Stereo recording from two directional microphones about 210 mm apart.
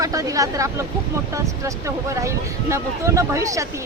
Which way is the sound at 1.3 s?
15° right (ahead or behind).